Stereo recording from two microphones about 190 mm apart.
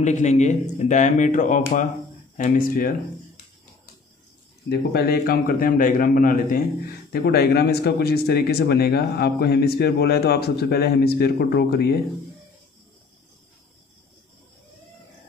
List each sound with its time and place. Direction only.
0.0 s speech: 40° left (ahead or behind)
4.6 s a man's voice: 55° left (ahead or behind)